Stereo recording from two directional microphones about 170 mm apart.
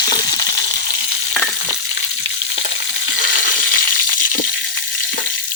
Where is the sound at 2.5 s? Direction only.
90° left; by 3.8 s 65° left (ahead or behind).